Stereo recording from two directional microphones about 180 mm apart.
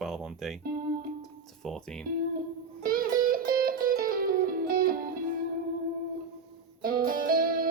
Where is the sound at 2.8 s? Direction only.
50° right (ahead or behind).